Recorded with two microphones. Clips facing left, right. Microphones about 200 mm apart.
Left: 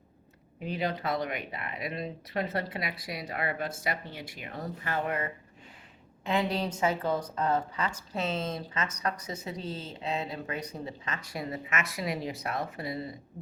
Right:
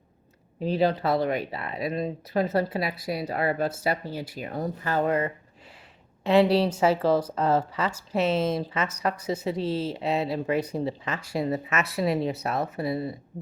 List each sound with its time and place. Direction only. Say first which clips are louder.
0.6 s speech: right 8 dB; 35° right (ahead or behind)